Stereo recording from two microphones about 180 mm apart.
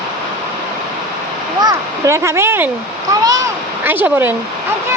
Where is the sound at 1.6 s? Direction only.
20° right (ahead or behind).